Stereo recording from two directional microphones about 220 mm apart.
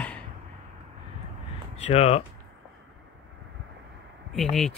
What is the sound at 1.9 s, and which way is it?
Speech, 30° left (ahead or behind).